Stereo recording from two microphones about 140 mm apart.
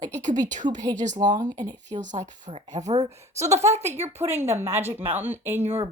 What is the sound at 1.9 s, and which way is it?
Speech, 60° right (ahead or behind).